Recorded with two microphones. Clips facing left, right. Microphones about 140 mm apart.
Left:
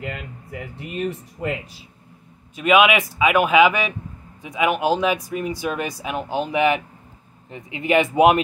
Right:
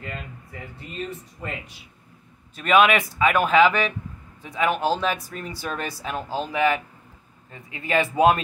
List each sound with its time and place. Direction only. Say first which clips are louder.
0.5 s speech: left 6 dB; 15° left (ahead or behind)
2.5 s speech: left 2 dB; 10° left (ahead or behind)